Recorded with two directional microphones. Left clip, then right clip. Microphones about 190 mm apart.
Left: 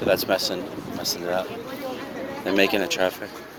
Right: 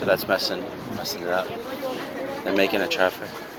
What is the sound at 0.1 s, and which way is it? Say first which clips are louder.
Speech: even; 45° left (ahead or behind).